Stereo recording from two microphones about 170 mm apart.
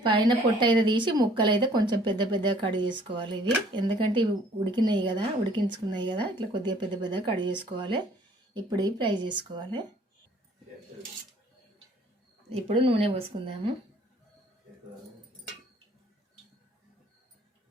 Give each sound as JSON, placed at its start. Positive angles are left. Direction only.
{"t": 0.0, "sound": "a woman's voice", "side_deg": -25}
{"t": 12.6, "sound": "speech", "side_deg": -35}